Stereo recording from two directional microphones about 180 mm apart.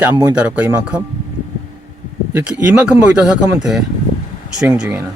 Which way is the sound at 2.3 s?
5° right (ahead or behind).